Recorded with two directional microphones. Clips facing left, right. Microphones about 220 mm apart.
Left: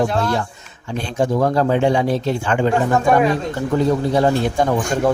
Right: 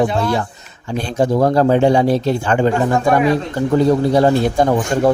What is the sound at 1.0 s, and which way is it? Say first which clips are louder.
Speech: right 3 dB; 35° right (ahead or behind).